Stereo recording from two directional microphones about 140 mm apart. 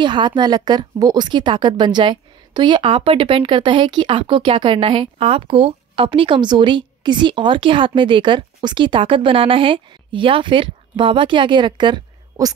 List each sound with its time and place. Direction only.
0.0 s a woman's voice: 35° right (ahead or behind)